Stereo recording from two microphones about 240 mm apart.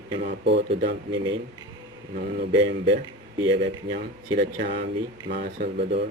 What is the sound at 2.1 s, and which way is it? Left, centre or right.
Speech, right.